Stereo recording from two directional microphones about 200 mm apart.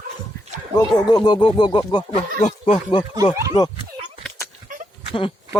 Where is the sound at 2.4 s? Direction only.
35° left (ahead or behind).